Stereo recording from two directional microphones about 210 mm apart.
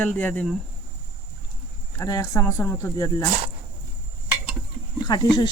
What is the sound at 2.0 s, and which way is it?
Speech, 15° left (ahead or behind).